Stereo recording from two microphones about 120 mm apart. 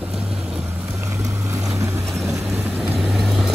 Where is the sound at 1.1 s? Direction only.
25° right (ahead or behind).